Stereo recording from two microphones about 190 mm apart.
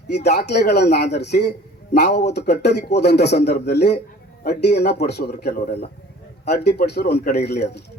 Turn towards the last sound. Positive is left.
turn(degrees=60)  # may be behind; listen again after turning